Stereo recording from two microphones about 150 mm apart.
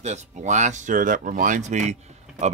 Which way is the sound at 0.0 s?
50° right (ahead or behind).